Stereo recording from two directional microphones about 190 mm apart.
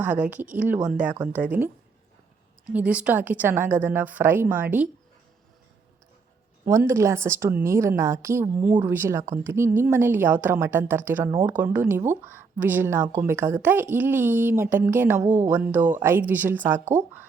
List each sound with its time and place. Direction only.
0.0 s a woman's voice: 10° right (ahead or behind)
2.7 s a woman's voice: 5° right (ahead or behind)
6.7 s a woman's voice: 15° right (ahead or behind)
11.4 s a woman's voice: 10° right (ahead or behind)